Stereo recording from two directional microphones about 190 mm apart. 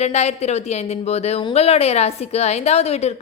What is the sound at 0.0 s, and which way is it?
A woman's voice, 35° left (ahead or behind).